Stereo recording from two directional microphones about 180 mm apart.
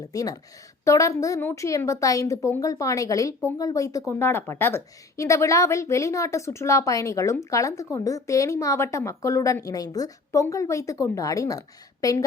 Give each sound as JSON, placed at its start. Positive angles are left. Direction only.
{"t": 0.1, "sound": "a woman's voice", "side_deg": 20}